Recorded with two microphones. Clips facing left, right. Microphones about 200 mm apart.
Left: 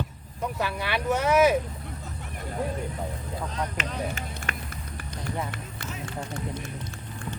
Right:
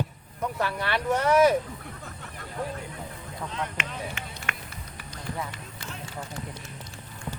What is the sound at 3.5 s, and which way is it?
Speech, 40° left (ahead or behind).